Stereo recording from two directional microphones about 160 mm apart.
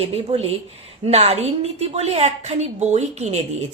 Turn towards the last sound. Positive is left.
turn(degrees=-45)  # may be behind; listen again after turning